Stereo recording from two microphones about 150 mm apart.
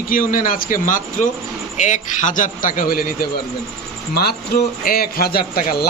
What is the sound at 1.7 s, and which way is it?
Speech, 50° left (ahead or behind).